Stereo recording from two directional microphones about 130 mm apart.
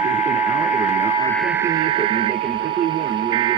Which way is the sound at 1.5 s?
20° right (ahead or behind).